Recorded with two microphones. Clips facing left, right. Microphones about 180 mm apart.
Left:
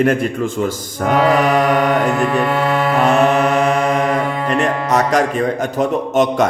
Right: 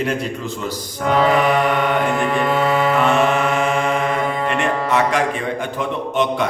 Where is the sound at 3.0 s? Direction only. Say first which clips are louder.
Left 3 dB; 40° left (ahead or behind).